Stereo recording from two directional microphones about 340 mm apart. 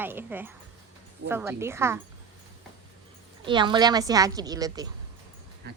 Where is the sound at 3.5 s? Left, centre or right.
Centre.